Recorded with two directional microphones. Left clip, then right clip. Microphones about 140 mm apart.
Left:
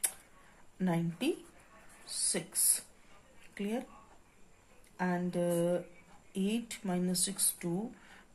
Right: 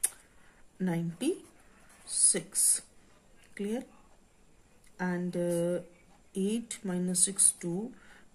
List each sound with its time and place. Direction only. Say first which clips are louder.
0.7 s speech: even; 35° right (ahead or behind)
4.9 s speech: even; 35° right (ahead or behind)